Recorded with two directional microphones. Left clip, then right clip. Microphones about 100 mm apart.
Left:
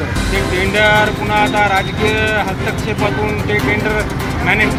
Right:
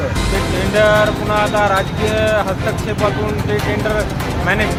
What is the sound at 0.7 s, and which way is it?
Speech, 40° right (ahead or behind).